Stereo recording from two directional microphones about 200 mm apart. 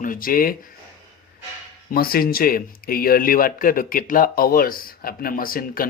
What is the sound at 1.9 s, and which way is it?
Speech, 50° left (ahead or behind).